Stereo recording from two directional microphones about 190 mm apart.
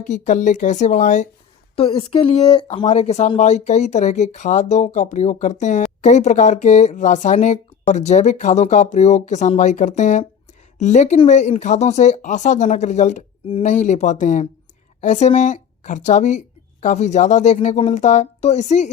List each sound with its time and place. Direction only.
0.1 s a woman's voice: 40° left (ahead or behind)